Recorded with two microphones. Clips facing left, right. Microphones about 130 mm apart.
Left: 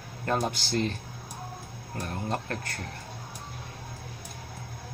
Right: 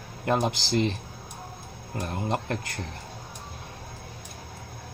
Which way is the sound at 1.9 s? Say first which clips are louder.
Right 3 dB; 20° right (ahead or behind).